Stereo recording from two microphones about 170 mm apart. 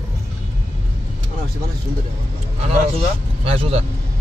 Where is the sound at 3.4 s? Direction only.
35° right (ahead or behind).